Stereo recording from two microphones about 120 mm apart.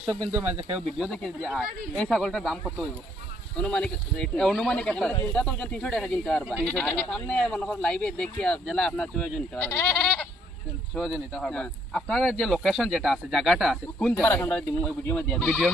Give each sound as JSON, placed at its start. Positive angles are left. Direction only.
{"t": 0.3, "sound": "speech", "side_deg": -20}
{"t": 0.9, "sound": "speech", "side_deg": 0}
{"t": 9.6, "sound": "speech", "side_deg": 20}
{"t": 10.0, "sound": "bleat", "side_deg": 5}
{"t": 10.9, "sound": "speech", "side_deg": 10}
{"t": 14.1, "sound": "speech", "side_deg": 15}